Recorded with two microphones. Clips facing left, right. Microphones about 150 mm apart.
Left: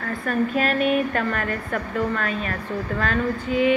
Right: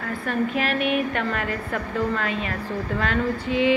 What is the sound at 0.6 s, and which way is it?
A woman's voice, 15° right (ahead or behind).